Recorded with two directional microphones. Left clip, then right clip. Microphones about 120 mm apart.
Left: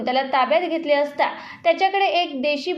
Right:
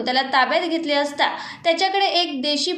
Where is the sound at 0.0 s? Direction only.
50° left (ahead or behind).